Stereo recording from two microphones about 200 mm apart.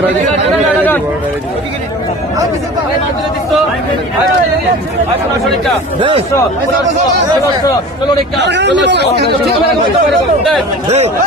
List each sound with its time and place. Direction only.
0.8 s a sound: 10° left (ahead or behind)
6.0 s speech: 25° right (ahead or behind)
8.4 s speech: 60° right (ahead or behind)
10.1 s speech: centre (ahead or behind)
10.8 s speech: 30° right (ahead or behind)